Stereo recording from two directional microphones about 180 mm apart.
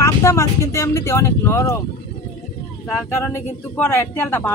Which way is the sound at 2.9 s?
15° left (ahead or behind).